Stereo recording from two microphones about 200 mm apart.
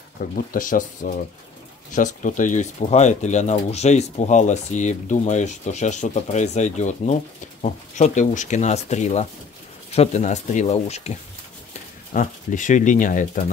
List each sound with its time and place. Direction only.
0.2 s speech: 45° left (ahead or behind)